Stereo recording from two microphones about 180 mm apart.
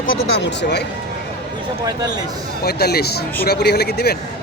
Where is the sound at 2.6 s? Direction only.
60° left (ahead or behind).